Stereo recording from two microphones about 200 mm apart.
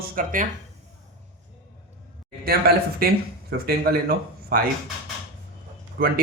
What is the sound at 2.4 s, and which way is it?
Speech, 50° right (ahead or behind).